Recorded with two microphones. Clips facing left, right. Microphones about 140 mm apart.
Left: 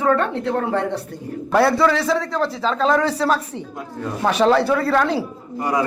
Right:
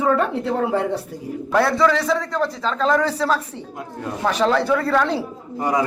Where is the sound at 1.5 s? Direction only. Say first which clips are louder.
Left 1 dB; 5° left (ahead or behind).